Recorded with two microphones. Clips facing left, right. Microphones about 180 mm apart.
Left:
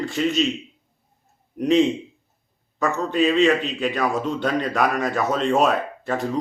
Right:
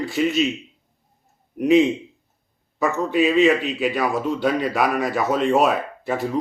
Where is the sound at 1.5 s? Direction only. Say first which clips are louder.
Right 2 dB; 5° right (ahead or behind).